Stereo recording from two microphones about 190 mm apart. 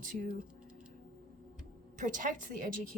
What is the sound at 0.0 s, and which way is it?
Speech, 45° right (ahead or behind).